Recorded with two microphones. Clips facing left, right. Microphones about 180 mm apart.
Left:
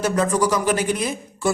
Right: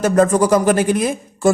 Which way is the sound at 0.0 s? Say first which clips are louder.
Right 6 dB; 50° right (ahead or behind).